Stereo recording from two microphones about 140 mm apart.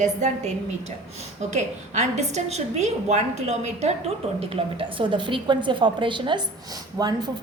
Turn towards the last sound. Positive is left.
turn(degrees=-25)  # may be behind; listen again after turning